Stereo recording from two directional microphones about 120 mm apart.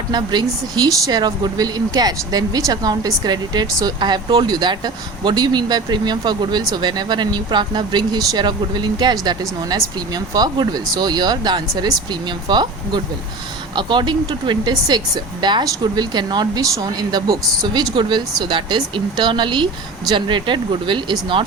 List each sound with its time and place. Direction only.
0.1 s speech: 35° right (ahead or behind)